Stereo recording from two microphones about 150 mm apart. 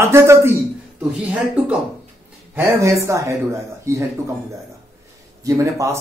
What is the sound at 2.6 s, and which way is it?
Speech, 20° right (ahead or behind).